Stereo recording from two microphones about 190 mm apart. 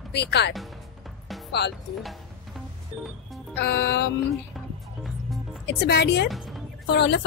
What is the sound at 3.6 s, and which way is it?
Speech, 60° left (ahead or behind).